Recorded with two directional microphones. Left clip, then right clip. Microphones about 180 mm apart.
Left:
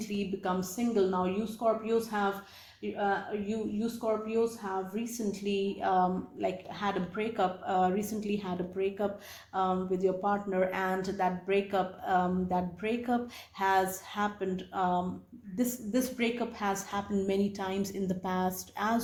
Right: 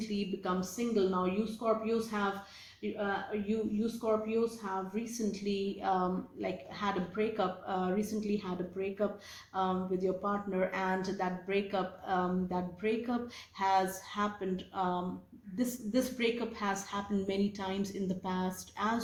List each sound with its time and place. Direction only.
0.0 s a woman's voice: 45° left (ahead or behind)
3.3 s a woman's voice: 35° left (ahead or behind)